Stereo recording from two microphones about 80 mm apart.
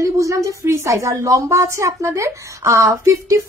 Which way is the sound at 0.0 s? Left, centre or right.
Right.